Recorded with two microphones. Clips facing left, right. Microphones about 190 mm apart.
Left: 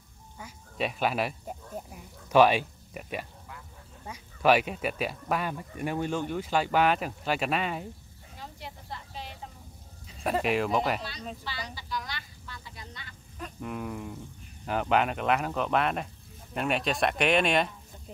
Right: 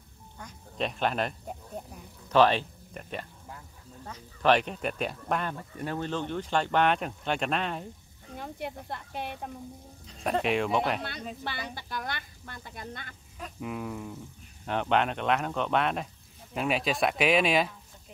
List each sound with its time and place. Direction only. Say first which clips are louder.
0.4 s speech: left 1 dB; 5° left (ahead or behind)
8.4 s speech: right 7 dB; 55° right (ahead or behind)
10.0 s speech: even; 5° left (ahead or behind)
11.0 s speech: right 2 dB; 55° right (ahead or behind)
13.4 s speech: even; centre (ahead or behind)